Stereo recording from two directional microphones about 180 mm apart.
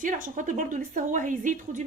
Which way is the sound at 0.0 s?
45° right (ahead or behind).